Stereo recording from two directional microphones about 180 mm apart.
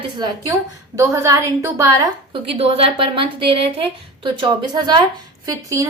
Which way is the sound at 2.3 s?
30° right (ahead or behind).